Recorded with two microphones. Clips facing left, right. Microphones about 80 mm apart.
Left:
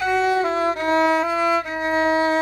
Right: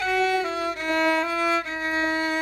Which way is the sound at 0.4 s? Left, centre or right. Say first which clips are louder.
Left 6 dB; left.